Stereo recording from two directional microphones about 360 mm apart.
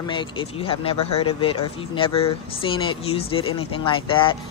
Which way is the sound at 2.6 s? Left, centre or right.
Centre.